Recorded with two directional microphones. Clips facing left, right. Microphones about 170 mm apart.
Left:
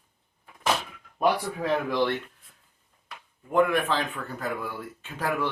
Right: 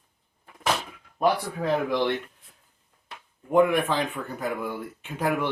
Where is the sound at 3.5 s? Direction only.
15° right (ahead or behind).